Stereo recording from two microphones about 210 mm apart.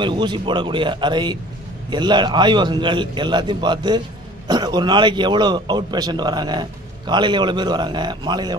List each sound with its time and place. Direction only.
0.0 s speech: 20° right (ahead or behind)